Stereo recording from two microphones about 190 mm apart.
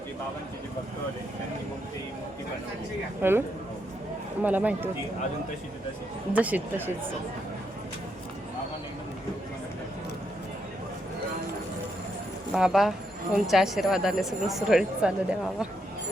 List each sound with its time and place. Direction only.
3.2 s speech: 10° right (ahead or behind)
4.4 s speech: 10° right (ahead or behind)
6.3 s speech: 10° right (ahead or behind)
12.5 s a woman's voice: centre (ahead or behind)